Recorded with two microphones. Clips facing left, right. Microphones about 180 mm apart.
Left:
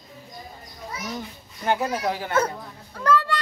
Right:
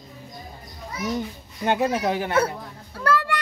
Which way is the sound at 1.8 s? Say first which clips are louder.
Right 3 dB; 25° right (ahead or behind).